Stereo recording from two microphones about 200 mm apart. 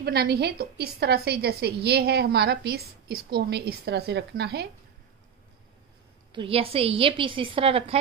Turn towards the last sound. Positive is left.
turn(degrees=-30)  # may be behind; listen again after turning